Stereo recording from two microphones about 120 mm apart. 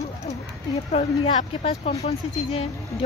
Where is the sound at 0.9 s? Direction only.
75° left (ahead or behind).